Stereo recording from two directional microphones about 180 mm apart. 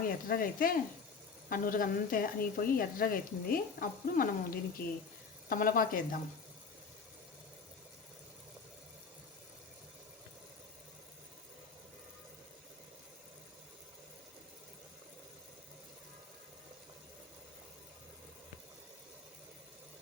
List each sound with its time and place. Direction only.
0.0 s a woman's voice: 55° left (ahead or behind)